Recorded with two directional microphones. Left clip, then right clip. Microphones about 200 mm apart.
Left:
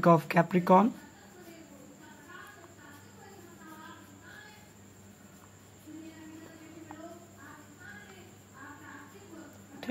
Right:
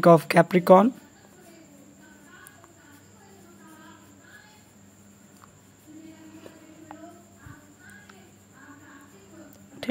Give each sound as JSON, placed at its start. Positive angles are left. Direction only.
{"t": 0.0, "sound": "speech", "side_deg": -40}